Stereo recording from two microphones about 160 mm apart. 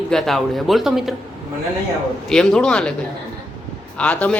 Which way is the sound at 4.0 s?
10° left (ahead or behind).